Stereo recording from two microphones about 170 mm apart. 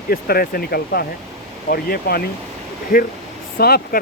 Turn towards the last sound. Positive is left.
turn(degrees=65)  # may be behind; listen again after turning